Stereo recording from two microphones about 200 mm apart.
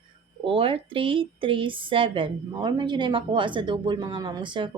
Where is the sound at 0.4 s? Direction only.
25° right (ahead or behind).